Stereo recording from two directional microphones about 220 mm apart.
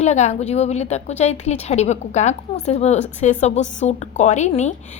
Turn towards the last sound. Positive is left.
turn(degrees=30)  # may be behind; listen again after turning